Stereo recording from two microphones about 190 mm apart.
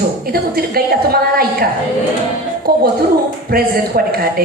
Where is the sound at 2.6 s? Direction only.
50° right (ahead or behind).